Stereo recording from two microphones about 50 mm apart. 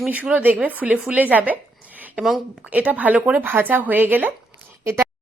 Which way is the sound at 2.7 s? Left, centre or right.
Right.